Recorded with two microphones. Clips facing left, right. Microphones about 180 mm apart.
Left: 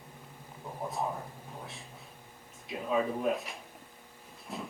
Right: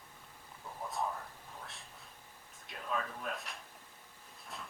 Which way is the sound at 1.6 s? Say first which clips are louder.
Left 5 dB; centre (ahead or behind).